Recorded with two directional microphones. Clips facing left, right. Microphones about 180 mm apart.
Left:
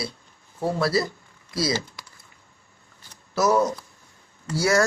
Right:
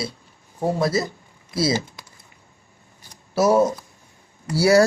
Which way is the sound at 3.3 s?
25° right (ahead or behind).